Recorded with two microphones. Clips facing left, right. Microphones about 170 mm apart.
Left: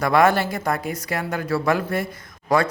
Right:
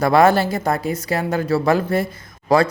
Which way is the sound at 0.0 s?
30° right (ahead or behind).